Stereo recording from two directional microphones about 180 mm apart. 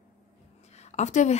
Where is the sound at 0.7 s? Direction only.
40° left (ahead or behind).